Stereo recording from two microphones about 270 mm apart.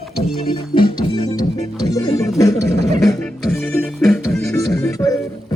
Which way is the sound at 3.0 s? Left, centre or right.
Centre.